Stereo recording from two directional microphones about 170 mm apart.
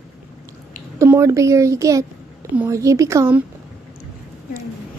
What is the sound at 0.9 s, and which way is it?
Speech, 15° right (ahead or behind).